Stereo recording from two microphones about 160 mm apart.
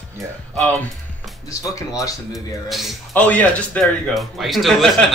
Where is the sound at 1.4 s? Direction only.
20° left (ahead or behind).